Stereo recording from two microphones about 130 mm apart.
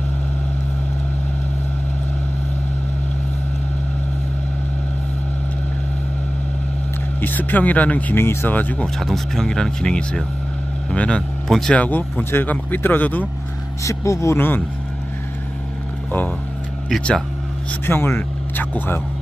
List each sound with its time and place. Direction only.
7.2 s speech: 15° left (ahead or behind)
8.8 s speech: 5° left (ahead or behind)
16.9 s speech: 5° left (ahead or behind)
17.8 s speech: 15° left (ahead or behind)